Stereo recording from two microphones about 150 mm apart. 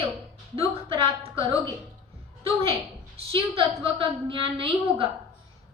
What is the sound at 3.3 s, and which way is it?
A woman's voice, 35° right (ahead or behind).